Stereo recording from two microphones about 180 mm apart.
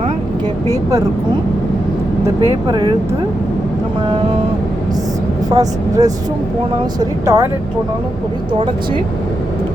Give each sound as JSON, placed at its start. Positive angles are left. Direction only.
{"t": 0.7, "sound": "speech", "side_deg": -20}
{"t": 2.5, "sound": "speech", "side_deg": -25}
{"t": 5.5, "sound": "speech", "side_deg": -20}